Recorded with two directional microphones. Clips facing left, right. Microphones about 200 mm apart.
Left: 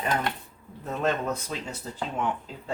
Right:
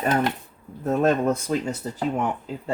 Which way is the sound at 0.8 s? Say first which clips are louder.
Right 7 dB; 45° right (ahead or behind).